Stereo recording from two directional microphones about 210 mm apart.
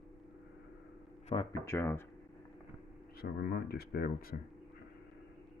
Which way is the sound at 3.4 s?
50° left (ahead or behind).